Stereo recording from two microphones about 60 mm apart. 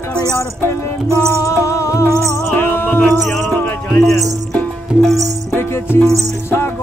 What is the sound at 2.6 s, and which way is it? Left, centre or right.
Music, left.